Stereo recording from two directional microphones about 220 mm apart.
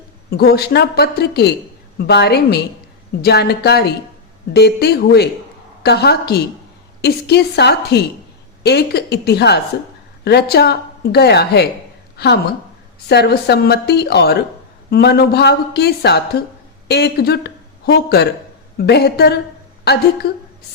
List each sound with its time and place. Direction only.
0.3 s a woman's voice: 45° left (ahead or behind)